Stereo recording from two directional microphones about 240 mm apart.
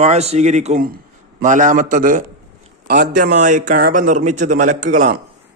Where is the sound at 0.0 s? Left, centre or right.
Right.